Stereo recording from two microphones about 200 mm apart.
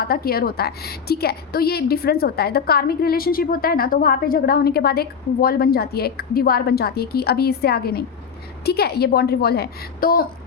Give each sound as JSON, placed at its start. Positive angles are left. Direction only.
{"t": 0.0, "sound": "a woman's voice", "side_deg": 50}